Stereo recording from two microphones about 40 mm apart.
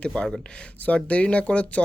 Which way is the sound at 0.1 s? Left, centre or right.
Left.